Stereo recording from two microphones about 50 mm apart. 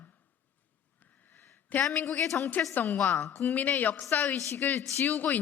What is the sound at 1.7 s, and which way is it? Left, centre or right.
A woman's voice, left.